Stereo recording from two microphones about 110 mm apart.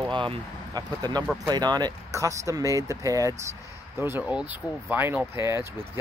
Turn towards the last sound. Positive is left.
turn(degrees=-25)  # may be behind; listen again after turning